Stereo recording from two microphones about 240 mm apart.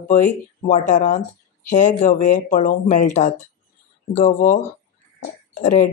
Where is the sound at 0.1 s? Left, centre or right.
Left.